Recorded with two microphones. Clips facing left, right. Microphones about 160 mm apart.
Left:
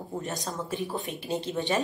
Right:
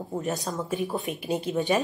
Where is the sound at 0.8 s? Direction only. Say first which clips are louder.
Right 3 dB; 20° right (ahead or behind).